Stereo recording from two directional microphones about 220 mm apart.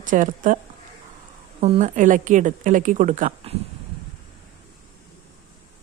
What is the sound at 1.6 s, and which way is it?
Speech, 30° right (ahead or behind).